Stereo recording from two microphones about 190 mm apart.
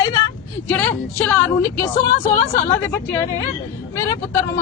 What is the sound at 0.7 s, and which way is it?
Speech, 10° left (ahead or behind).